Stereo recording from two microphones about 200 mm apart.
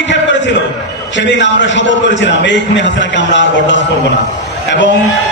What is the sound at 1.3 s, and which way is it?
A man's voice, 65° left (ahead or behind).